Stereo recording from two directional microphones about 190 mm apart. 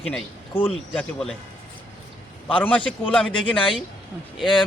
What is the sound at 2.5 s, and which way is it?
Speech, 30° left (ahead or behind).